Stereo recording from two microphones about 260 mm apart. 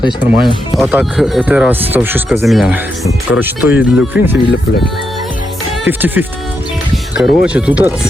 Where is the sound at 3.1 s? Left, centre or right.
Centre.